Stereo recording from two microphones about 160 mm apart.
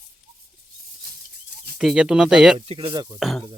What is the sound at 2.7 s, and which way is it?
Speech, 35° right (ahead or behind).